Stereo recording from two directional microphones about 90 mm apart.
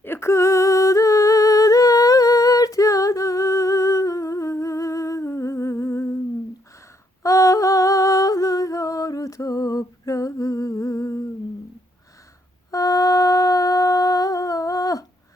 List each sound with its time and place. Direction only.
0.0 s a sound: 30° left (ahead or behind)
7.2 s humming: 35° left (ahead or behind)
12.7 s humming: 40° left (ahead or behind)